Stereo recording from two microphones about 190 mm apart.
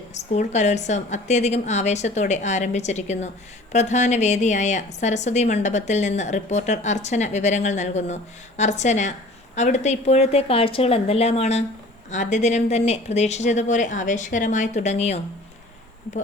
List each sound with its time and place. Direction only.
0.1 s a woman's voice: 35° left (ahead or behind)